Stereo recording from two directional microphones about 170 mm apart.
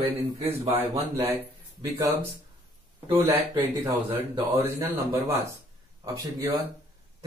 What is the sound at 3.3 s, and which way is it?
Speech, 30° right (ahead or behind).